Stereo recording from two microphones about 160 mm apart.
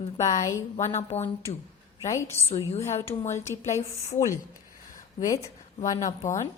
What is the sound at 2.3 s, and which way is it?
Speech, 40° left (ahead or behind).